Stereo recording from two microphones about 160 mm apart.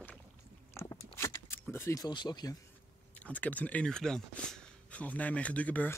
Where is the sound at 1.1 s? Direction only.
15° left (ahead or behind).